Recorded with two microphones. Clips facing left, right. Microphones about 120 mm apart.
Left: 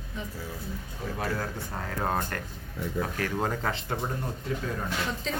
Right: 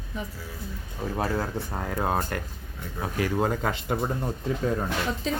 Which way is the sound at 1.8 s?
10° right (ahead or behind).